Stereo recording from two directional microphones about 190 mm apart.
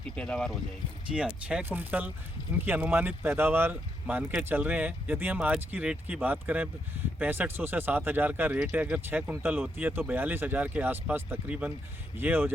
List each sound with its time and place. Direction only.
0.2 s speech: 5° left (ahead or behind)